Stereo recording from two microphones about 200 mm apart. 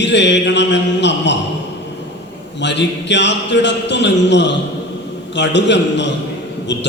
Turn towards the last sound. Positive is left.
turn(degrees=60)  # may be behind; listen again after turning